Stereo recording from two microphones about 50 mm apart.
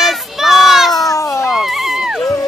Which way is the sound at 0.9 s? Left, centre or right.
Centre.